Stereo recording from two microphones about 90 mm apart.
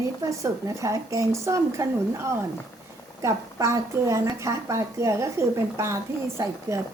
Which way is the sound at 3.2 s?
35° right (ahead or behind).